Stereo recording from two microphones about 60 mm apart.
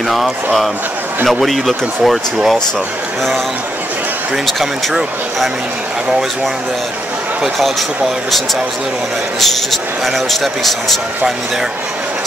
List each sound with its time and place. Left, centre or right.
0.1 s speech: centre
6.0 s speech: centre
9.4 s speech: centre